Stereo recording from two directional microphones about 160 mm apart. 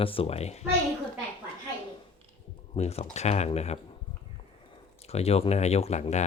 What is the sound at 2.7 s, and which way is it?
Speech, 40° left (ahead or behind).